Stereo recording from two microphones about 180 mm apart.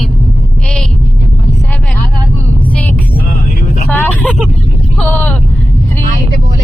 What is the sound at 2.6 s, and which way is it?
Vehicle, 10° left (ahead or behind).